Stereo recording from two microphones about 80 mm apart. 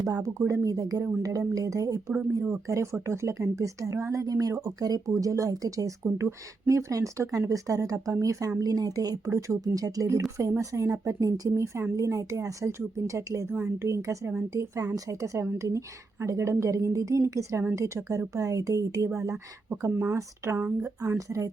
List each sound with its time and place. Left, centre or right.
0.0 s a woman's voice: right